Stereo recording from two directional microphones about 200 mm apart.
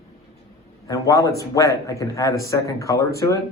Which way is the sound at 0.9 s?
15° left (ahead or behind).